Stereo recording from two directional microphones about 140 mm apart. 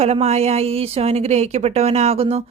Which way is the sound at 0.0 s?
50° right (ahead or behind).